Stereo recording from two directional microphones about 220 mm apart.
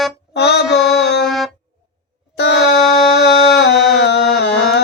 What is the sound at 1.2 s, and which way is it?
Music, centre (ahead or behind).